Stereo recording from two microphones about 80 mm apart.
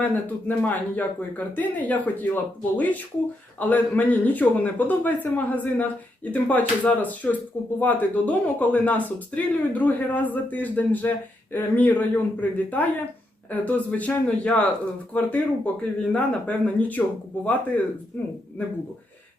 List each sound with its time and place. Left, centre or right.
0.0 s speech: left